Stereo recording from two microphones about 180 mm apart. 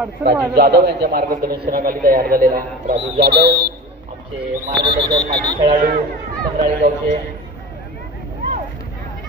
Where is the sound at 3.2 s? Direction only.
70° right (ahead or behind).